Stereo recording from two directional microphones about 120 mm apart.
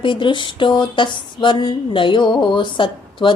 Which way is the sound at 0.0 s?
40° left (ahead or behind).